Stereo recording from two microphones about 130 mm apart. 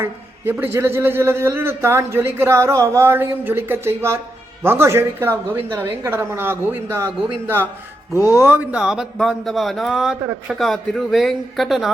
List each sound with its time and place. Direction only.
0.6 s a man's voice: 20° right (ahead or behind)
8.1 s speech: 25° left (ahead or behind)
8.4 s a man's voice: 10° right (ahead or behind)